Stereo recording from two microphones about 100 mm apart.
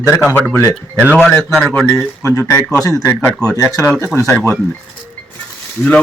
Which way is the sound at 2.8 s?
35° left (ahead or behind).